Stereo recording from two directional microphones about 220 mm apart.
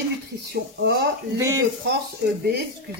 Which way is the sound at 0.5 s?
45° right (ahead or behind).